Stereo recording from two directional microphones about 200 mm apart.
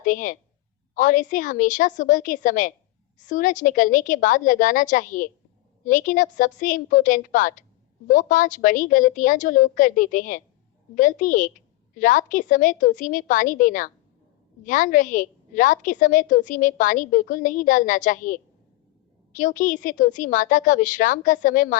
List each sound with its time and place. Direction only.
0.0 s a woman's voice: 40° left (ahead or behind)